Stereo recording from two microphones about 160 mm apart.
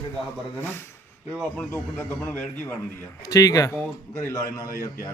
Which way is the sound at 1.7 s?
15° left (ahead or behind).